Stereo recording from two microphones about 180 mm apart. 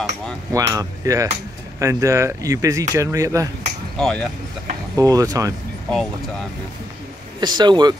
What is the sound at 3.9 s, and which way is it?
Speech, 5° left (ahead or behind).